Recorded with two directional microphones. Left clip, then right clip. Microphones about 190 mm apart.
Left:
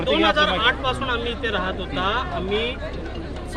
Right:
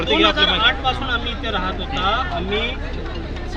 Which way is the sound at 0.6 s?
30° left (ahead or behind).